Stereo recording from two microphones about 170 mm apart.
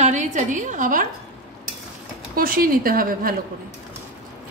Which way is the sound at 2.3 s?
60° right (ahead or behind).